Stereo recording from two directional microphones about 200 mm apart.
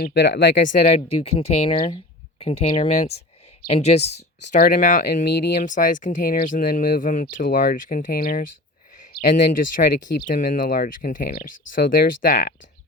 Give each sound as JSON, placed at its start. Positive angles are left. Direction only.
{"t": 0.0, "sound": "speech", "side_deg": 55}